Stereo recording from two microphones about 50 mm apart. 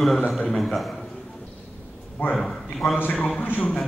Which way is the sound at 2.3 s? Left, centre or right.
Centre.